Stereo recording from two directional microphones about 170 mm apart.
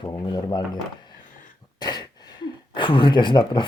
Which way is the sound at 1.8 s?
25° left (ahead or behind).